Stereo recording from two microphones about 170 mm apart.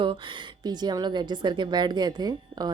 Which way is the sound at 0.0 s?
30° right (ahead or behind).